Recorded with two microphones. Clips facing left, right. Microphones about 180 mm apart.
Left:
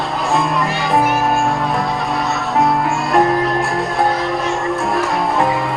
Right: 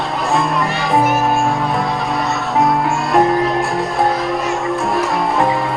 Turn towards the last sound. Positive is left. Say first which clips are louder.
# even
turn(degrees=0)  # may be behind; listen again after turning